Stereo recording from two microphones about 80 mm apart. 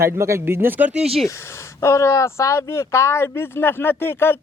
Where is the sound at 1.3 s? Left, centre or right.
Left.